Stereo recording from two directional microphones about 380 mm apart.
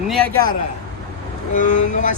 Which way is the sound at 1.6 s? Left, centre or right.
Centre.